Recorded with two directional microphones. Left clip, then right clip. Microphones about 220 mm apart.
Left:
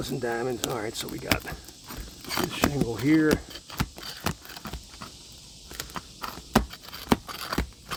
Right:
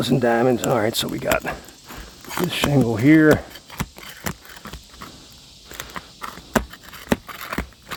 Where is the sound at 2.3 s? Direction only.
20° left (ahead or behind).